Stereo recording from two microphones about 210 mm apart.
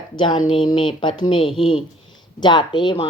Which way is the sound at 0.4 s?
25° left (ahead or behind).